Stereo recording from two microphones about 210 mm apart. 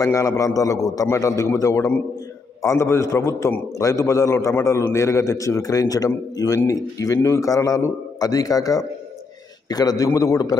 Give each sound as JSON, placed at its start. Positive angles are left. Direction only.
{"t": 0.0, "sound": "a man's voice", "side_deg": 15}